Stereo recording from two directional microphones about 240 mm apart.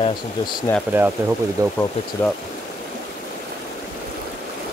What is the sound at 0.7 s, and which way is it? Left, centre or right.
Speech, centre.